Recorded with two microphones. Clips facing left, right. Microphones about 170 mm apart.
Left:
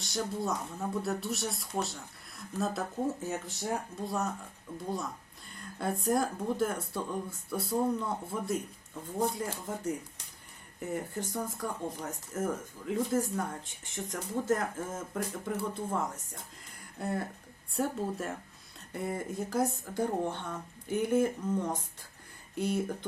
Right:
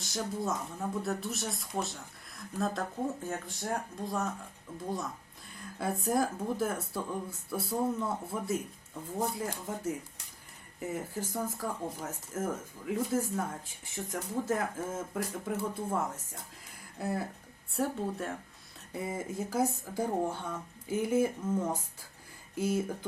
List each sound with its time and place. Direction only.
0.0 s speech: centre (ahead or behind)